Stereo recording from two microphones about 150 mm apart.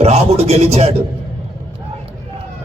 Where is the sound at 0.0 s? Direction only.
45° right (ahead or behind).